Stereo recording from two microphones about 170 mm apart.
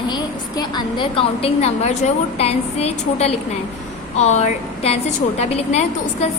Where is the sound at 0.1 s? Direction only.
25° left (ahead or behind).